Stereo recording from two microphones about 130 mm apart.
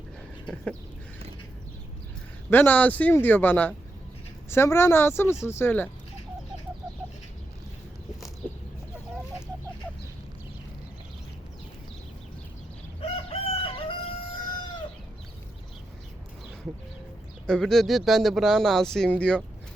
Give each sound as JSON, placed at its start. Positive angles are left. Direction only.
{"t": 0.4, "sound": "speech", "side_deg": 5}
{"t": 2.5, "sound": "a man's voice", "side_deg": 15}
{"t": 13.0, "sound": "crowing", "side_deg": 50}
{"t": 17.4, "sound": "speech", "side_deg": 5}